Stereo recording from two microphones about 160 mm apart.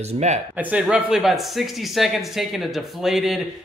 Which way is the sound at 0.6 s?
10° right (ahead or behind).